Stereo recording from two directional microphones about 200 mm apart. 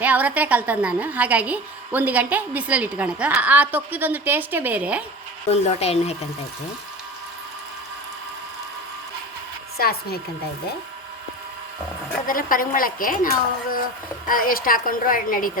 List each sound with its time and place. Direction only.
0.0 s a woman's voice: 10° right (ahead or behind)
5.5 s speech: 30° left (ahead or behind)
9.7 s a woman's voice: 50° left (ahead or behind)
12.3 s a woman's voice: 45° left (ahead or behind)
14.3 s a woman's voice: 45° left (ahead or behind)